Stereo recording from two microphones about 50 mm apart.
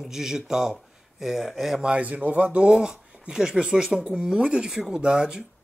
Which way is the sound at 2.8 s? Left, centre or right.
Centre.